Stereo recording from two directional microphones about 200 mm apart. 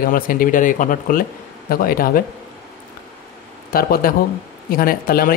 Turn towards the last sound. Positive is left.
turn(degrees=45)  # may be behind; listen again after turning